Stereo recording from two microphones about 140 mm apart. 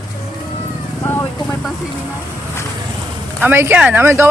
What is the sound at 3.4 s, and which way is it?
Speech, 15° right (ahead or behind).